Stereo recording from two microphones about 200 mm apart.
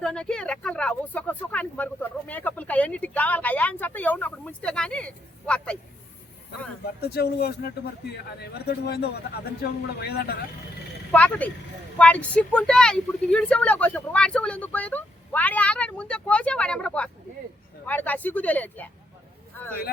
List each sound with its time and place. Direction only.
0.0 s speech: 5° left (ahead or behind)
7.0 s a man's voice: 50° left (ahead or behind)
11.1 s speech: 10° left (ahead or behind)